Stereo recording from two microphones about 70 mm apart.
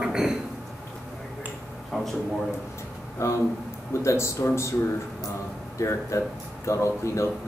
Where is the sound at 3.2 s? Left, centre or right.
Left.